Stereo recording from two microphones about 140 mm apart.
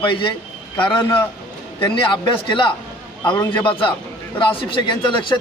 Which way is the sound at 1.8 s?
35° left (ahead or behind).